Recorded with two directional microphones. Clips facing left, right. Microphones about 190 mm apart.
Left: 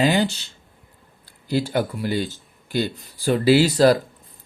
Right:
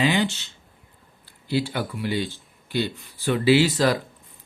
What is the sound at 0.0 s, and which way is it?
Speech, 40° left (ahead or behind).